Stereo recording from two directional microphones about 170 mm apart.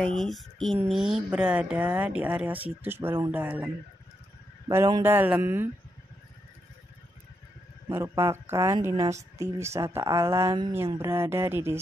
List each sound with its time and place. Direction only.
0.0 s a sound: centre (ahead or behind)
0.8 s speech: centre (ahead or behind)
5.0 s speech: 10° right (ahead or behind)
7.9 s speech: 15° right (ahead or behind)